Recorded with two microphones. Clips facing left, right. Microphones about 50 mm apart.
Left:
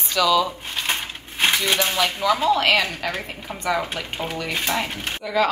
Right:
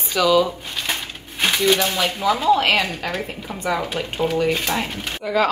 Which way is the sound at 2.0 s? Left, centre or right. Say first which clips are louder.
Even; centre.